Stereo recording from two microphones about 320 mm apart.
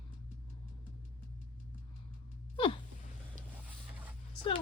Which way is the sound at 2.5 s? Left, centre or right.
Centre.